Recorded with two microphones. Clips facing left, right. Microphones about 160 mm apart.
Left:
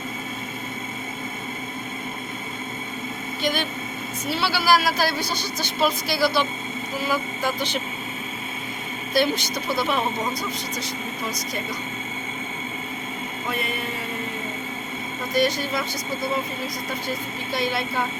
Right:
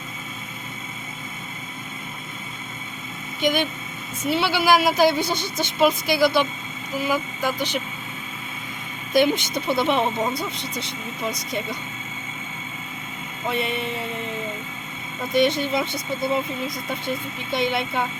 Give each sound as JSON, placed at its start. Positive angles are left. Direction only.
{"t": 3.4, "sound": "speech", "side_deg": -15}
{"t": 9.1, "sound": "speech", "side_deg": -20}
{"t": 13.5, "sound": "speech", "side_deg": -25}
{"t": 15.3, "sound": "speech", "side_deg": -25}